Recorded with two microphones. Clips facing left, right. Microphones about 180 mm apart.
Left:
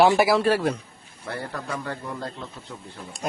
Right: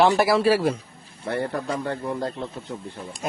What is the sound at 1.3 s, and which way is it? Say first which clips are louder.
Speech: right 6 dB; 30° right (ahead or behind).